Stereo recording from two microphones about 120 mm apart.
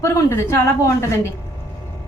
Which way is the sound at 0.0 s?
20° left (ahead or behind).